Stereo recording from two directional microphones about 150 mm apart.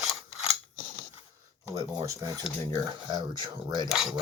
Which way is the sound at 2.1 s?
20° right (ahead or behind).